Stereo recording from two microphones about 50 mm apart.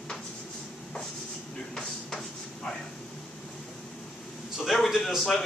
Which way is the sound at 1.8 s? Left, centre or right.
Centre.